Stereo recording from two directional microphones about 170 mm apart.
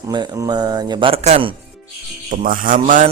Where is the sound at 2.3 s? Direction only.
50° right (ahead or behind).